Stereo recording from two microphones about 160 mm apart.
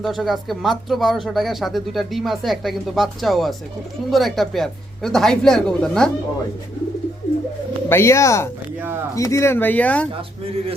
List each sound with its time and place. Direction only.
0.0 s speech: centre (ahead or behind)
7.9 s speech: 15° left (ahead or behind)